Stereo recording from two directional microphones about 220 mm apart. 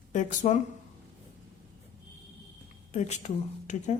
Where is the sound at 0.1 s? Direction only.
35° left (ahead or behind).